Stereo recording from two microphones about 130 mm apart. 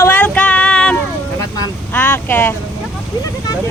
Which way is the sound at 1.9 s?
15° left (ahead or behind).